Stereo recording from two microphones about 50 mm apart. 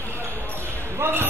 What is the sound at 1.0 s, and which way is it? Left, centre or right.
Basketball bounce, right.